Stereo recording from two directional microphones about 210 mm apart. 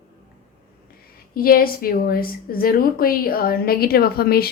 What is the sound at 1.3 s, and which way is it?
A woman's voice, 45° left (ahead or behind).